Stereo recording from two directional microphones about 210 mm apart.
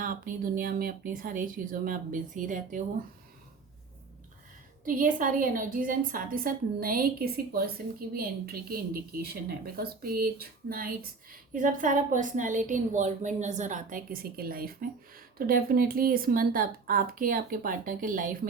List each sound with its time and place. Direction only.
0.0 s a woman's voice: 40° right (ahead or behind)
4.9 s a woman's voice: 40° right (ahead or behind)